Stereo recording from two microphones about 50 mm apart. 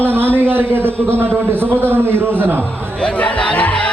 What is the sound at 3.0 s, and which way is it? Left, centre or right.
Music, left.